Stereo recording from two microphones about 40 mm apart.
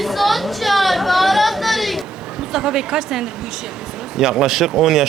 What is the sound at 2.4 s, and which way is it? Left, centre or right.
Speech, centre.